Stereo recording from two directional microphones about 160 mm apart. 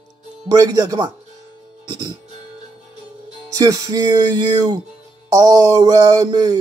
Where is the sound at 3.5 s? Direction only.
20° right (ahead or behind).